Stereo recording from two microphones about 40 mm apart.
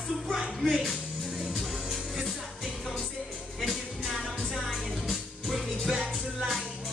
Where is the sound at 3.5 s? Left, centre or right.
Centre.